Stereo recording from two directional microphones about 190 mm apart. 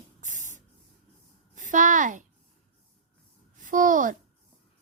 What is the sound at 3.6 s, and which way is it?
Speech, 45° right (ahead or behind).